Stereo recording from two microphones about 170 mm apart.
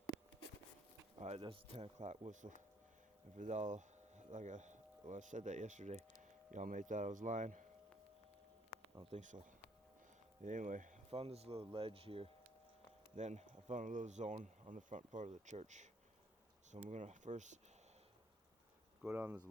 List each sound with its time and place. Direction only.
1.2 s speech: 35° right (ahead or behind)
9.0 s speech: 35° right (ahead or behind)
9.2 s speech: 45° right (ahead or behind)
16.9 s speech: 45° right (ahead or behind)
19.0 s speech: 10° right (ahead or behind)